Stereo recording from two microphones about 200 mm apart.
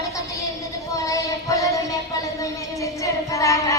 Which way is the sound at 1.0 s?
15° left (ahead or behind).